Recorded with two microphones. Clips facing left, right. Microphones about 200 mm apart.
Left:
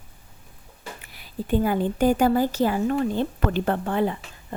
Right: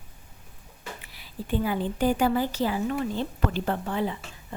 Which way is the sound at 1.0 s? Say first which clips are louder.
Left 5 dB; 50° left (ahead or behind).